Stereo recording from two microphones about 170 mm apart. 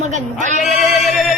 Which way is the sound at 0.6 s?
Centre (ahead or behind).